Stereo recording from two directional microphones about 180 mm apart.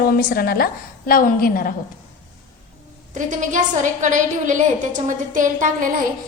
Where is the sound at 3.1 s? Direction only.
45° right (ahead or behind).